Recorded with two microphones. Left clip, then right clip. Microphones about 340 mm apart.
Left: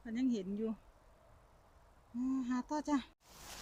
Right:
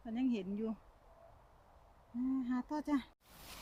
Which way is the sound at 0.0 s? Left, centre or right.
Centre.